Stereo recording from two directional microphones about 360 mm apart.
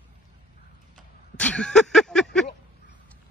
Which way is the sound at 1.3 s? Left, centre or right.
Centre.